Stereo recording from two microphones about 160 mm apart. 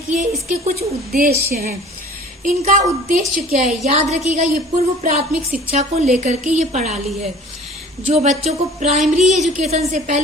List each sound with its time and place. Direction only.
0.1 s a woman's voice: 50° right (ahead or behind)
2.4 s a woman's voice: 55° right (ahead or behind)
8.1 s a woman's voice: 45° right (ahead or behind)